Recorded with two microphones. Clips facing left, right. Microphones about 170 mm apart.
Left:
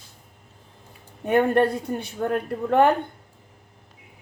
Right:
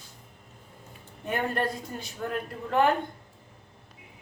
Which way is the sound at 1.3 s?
60° left (ahead or behind).